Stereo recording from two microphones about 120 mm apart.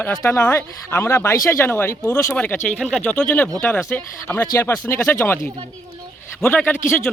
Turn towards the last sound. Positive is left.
turn(degrees=20)  # may be behind; listen again after turning